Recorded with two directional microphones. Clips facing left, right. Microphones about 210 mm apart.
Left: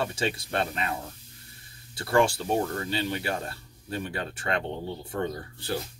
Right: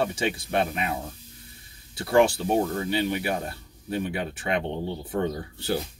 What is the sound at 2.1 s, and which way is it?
Speech, 20° right (ahead or behind).